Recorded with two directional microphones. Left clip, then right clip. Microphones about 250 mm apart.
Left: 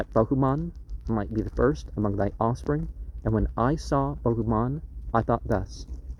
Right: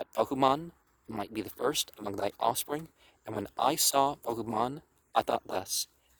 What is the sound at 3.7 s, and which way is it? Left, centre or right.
Speech, centre.